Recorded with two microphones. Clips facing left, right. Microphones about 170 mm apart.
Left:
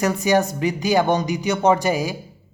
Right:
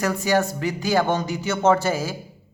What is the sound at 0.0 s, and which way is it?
Speech, 20° left (ahead or behind).